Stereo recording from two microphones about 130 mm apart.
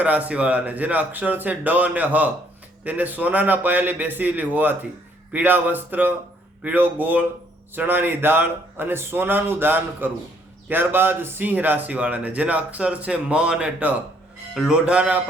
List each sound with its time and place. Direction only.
0.0 s speech: 10° right (ahead or behind)